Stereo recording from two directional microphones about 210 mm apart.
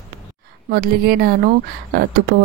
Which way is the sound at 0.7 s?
50° right (ahead or behind).